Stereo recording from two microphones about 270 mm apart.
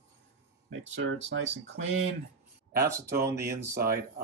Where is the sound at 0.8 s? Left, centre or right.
Right.